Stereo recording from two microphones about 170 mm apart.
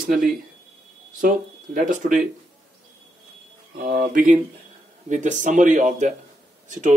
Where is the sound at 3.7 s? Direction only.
50° right (ahead or behind).